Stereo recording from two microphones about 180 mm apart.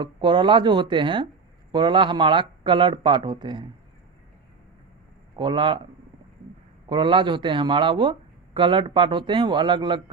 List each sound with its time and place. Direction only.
0.0 s speech: 25° right (ahead or behind)
5.4 s speech: 25° right (ahead or behind)